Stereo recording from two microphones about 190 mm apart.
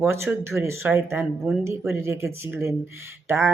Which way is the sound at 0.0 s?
15° right (ahead or behind).